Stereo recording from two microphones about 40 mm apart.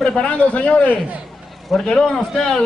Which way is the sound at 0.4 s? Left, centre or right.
Left.